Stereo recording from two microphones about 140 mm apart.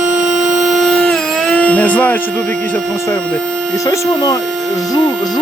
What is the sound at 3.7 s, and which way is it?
Speech, 20° left (ahead or behind).